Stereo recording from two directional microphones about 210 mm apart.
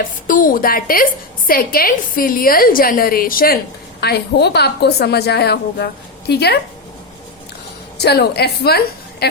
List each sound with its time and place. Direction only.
0.3 s a woman's voice: 40° left (ahead or behind)
7.9 s a woman's voice: 50° left (ahead or behind)